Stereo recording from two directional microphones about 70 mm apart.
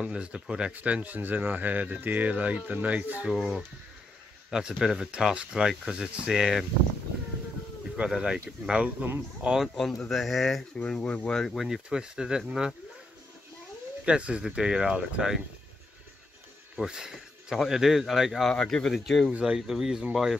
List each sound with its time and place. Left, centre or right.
0.0 s speech: centre
3.3 s speech: centre
8.0 s speech: centre
9.6 s speech: centre
10.9 s speech: centre
11.4 s speech: centre
14.0 s speech: centre
16.7 s speech: centre
18.5 s speech: centre
19.3 s speech: centre